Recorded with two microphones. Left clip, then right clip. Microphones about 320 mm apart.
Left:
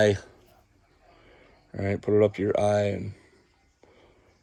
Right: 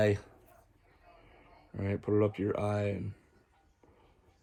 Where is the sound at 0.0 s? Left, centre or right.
Left.